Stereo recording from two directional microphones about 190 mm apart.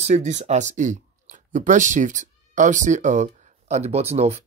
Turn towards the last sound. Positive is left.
turn(degrees=-35)  # may be behind; listen again after turning